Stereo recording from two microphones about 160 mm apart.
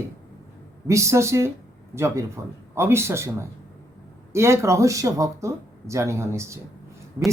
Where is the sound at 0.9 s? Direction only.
20° right (ahead or behind).